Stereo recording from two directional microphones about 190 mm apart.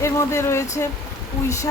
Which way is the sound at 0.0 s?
15° left (ahead or behind).